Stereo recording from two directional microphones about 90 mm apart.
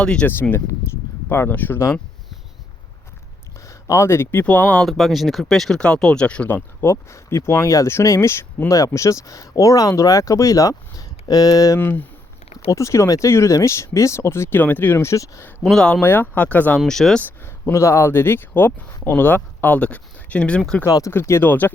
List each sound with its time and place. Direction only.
0.0 s speech: 10° left (ahead or behind)
1.3 s speech: 25° left (ahead or behind)
3.7 s speech: 35° left (ahead or behind); by 4.9 s 15° left (ahead or behind)
4.9 s speech: centre (ahead or behind)
6.8 s speech: 30° left (ahead or behind)
11.8 s speech: 20° left (ahead or behind)
12.7 s speech: 35° left (ahead or behind)
15.7 s speech: 10° left (ahead or behind)
16.0 s speech: 20° left (ahead or behind)
16.8 s speech: 5° left (ahead or behind)
17.4 s speech: 30° left (ahead or behind); by 20.6 s 15° left (ahead or behind)
20.8 s speech: 35° left (ahead or behind); by 21.7 s 20° left (ahead or behind)